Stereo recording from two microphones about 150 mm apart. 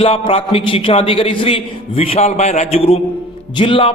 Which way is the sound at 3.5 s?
35° left (ahead or behind).